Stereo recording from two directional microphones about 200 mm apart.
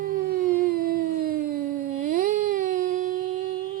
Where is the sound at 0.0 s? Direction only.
45° right (ahead or behind).